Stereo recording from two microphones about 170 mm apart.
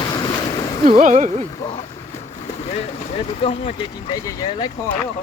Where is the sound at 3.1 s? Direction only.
35° left (ahead or behind).